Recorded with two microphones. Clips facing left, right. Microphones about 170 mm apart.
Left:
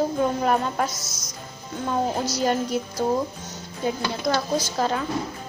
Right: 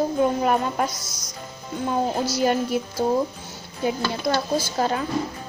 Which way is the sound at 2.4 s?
5° right (ahead or behind).